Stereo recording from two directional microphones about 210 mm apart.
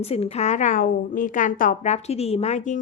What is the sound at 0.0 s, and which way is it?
A woman's voice, 30° left (ahead or behind).